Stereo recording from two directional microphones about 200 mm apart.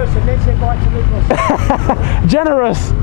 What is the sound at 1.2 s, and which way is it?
Speech, 20° left (ahead or behind).